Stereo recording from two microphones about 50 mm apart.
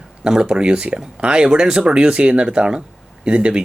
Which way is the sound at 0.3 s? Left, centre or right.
Centre.